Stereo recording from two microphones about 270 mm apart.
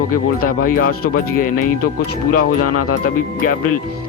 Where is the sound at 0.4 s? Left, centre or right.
Left.